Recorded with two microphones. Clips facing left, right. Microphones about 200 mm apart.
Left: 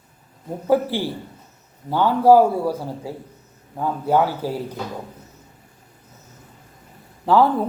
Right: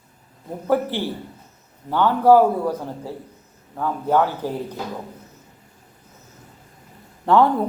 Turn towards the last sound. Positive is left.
turn(degrees=5)  # may be behind; listen again after turning